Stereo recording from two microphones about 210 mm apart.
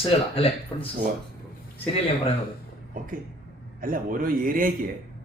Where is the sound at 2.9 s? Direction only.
40° right (ahead or behind).